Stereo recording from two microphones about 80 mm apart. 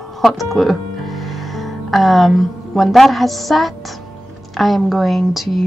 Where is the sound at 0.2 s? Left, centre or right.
Centre.